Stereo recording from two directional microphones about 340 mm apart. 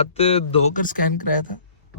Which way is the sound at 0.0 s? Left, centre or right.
Centre.